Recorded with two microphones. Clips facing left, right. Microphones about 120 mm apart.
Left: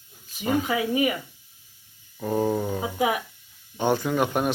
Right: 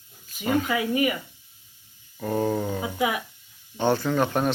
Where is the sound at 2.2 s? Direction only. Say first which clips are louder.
Left 1 dB; 5° left (ahead or behind).